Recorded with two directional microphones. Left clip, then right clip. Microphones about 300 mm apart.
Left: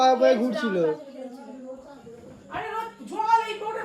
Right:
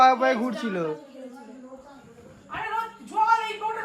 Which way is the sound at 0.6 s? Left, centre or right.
Centre.